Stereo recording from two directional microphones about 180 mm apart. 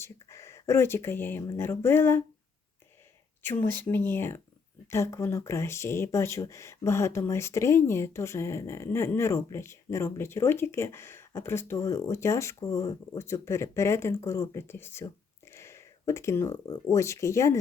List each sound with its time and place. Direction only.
0.0 s speech: 15° left (ahead or behind)
3.4 s speech: 10° left (ahead or behind)